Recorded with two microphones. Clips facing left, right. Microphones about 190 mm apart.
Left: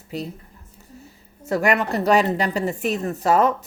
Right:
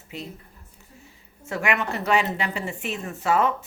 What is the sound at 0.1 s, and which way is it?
A woman's voice, 40° left (ahead or behind).